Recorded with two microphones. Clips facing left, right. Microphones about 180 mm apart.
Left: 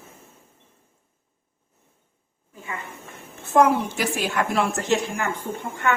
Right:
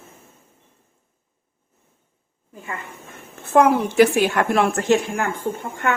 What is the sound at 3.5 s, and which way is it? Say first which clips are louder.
A woman's voice: right 4 dB; 65° right (ahead or behind).